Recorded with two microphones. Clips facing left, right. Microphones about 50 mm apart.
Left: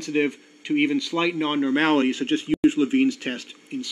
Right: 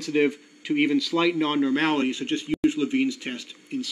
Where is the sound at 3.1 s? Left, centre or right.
Left.